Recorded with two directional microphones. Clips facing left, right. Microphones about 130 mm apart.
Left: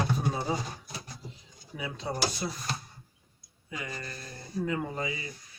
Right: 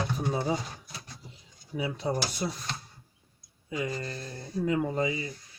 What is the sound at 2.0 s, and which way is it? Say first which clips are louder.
Speech: left 1 dB; 20° right (ahead or behind).